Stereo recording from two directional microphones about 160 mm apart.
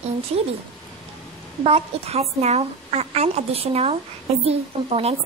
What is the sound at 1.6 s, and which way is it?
A woman's voice, 40° right (ahead or behind).